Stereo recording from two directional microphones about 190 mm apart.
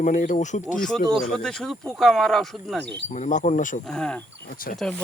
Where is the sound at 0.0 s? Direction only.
40° left (ahead or behind).